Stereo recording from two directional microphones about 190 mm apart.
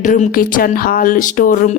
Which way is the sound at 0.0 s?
45° left (ahead or behind).